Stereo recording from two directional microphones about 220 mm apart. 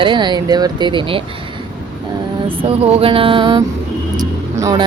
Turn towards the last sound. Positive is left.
turn(degrees=-15)  # may be behind; listen again after turning